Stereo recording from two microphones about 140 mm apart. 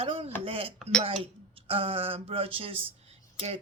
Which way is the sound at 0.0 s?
45° right (ahead or behind).